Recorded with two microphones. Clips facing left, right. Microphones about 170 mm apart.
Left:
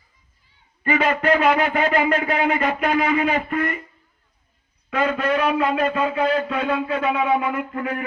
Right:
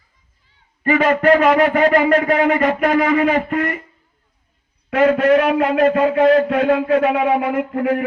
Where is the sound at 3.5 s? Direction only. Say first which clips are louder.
Right 3 dB; 80° right.